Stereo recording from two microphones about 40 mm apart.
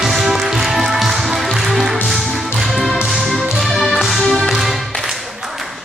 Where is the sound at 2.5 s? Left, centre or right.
Centre.